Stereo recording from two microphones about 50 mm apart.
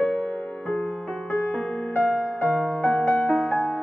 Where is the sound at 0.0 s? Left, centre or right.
Left.